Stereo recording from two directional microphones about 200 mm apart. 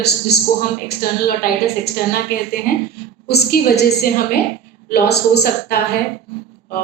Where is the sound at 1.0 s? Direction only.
45° left (ahead or behind).